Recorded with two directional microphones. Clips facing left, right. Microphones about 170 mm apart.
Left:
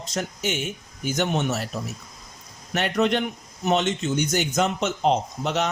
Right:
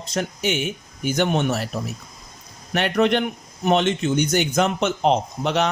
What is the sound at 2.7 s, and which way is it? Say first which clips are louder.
A man's voice: right 3 dB; 65° right (ahead or behind).